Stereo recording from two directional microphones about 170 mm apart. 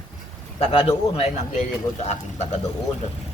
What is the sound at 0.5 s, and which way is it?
Speech, 35° left (ahead or behind).